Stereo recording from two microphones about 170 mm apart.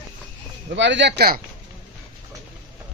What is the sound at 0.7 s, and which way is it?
Speech, 90° right.